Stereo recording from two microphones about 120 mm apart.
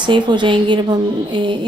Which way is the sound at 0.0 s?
40° right (ahead or behind).